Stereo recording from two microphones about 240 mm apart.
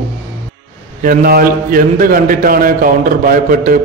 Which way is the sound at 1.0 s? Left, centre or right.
Right.